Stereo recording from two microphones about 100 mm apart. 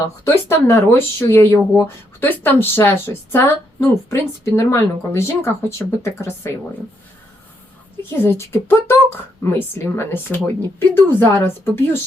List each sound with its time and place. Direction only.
0.0 s speech: 30° left (ahead or behind)
8.2 s speech: 25° left (ahead or behind)